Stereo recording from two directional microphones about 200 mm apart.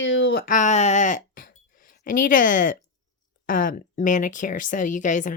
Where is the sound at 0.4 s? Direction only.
40° left (ahead or behind).